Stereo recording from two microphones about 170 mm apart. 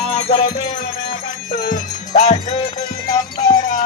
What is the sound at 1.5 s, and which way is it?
Music, 50° left (ahead or behind).